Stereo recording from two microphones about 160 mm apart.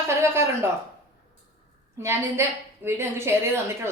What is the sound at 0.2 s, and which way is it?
Speech, 15° right (ahead or behind).